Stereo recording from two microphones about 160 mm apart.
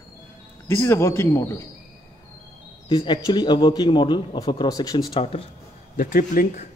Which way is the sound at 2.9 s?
30° left (ahead or behind).